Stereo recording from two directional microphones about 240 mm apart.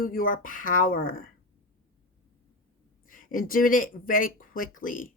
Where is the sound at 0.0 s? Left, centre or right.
Left.